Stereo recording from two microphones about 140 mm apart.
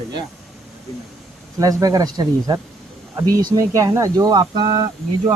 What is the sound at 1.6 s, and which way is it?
Speech, 25° right (ahead or behind).